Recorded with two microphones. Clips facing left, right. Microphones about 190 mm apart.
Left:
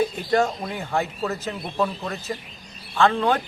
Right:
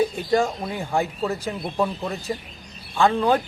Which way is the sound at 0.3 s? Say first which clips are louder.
Even; 10° right (ahead or behind).